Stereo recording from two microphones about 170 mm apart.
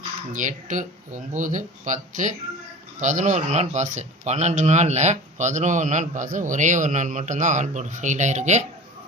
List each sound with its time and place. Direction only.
0.3 s speech: 50° right (ahead or behind)